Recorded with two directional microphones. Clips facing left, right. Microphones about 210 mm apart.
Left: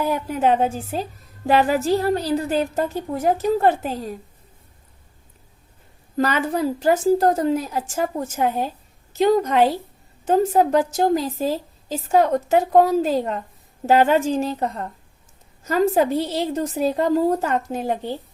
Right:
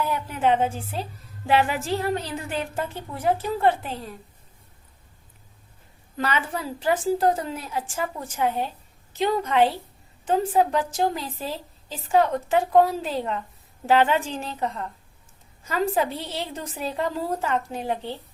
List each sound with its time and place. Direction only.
0.0 s a woman's voice: 40° left (ahead or behind)
6.1 s a woman's voice: 40° left (ahead or behind)